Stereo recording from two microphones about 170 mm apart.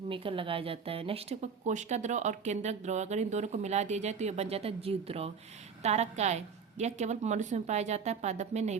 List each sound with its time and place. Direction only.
0.1 s speech: 30° right (ahead or behind)